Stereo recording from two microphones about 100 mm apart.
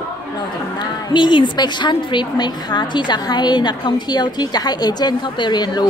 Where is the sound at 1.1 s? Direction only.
50° left (ahead or behind).